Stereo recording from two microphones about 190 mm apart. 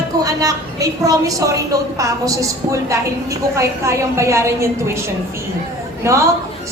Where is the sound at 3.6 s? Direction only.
15° right (ahead or behind).